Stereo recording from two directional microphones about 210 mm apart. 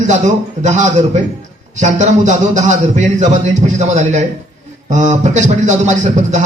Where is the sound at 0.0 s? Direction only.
35° right (ahead or behind).